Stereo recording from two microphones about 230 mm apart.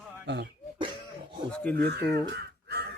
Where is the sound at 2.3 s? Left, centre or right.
Right.